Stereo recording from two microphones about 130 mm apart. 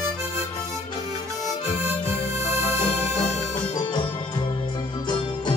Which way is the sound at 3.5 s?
35° left (ahead or behind).